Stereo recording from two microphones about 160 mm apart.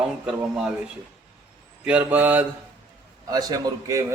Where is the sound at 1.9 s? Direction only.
10° right (ahead or behind).